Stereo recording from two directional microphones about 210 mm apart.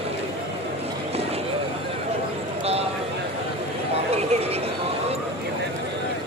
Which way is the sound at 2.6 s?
30° right (ahead or behind).